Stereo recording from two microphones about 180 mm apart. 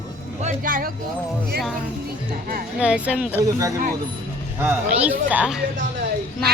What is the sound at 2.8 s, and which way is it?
Speech, 5° right (ahead or behind).